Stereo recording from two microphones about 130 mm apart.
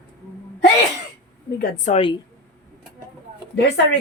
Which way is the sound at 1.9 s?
70° left (ahead or behind).